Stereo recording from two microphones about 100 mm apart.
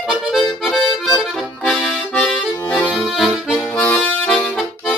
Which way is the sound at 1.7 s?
10° left (ahead or behind).